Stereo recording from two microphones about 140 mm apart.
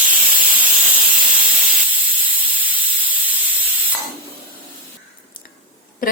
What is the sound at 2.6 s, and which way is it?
Steam, 10° right (ahead or behind).